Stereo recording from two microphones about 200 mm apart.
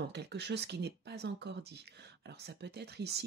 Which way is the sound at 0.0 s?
55° right (ahead or behind).